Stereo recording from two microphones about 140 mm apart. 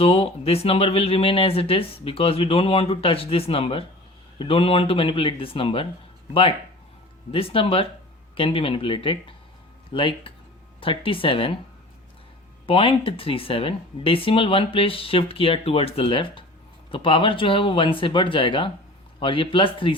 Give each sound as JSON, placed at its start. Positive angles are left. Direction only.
{"t": 0.0, "sound": "speech", "side_deg": 40}
{"t": 7.3, "sound": "speech", "side_deg": 40}
{"t": 12.6, "sound": "speech", "side_deg": 40}